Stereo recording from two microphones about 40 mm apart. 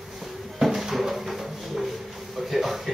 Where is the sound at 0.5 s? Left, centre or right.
Centre.